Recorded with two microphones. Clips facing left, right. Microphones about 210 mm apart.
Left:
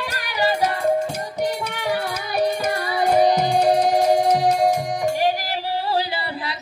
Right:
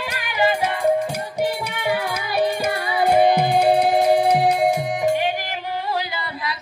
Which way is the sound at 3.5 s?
10° right (ahead or behind).